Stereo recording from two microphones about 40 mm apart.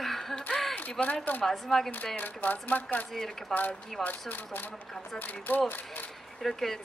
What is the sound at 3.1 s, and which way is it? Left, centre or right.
Speech, centre.